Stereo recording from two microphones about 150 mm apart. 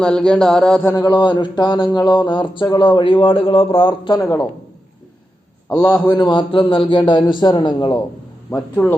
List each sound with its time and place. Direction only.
0.0 s speech: 5° left (ahead or behind)
0.9 s a sound: 30° left (ahead or behind)
4.2 s speech: 20° left (ahead or behind)
5.6 s a man's voice: 10° left (ahead or behind)
6.1 s a sound: 30° left (ahead or behind)
8.4 s a man's voice: 15° left (ahead or behind)